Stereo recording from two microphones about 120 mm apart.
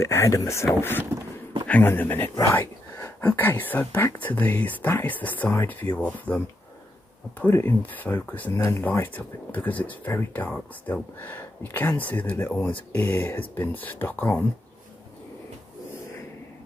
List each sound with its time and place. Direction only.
0.0 s speech: 25° left (ahead or behind)
8.5 s speech: 25° left (ahead or behind)
8.8 s speech: 15° left (ahead or behind)